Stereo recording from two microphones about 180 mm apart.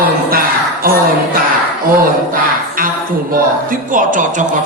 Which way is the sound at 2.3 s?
50° right (ahead or behind).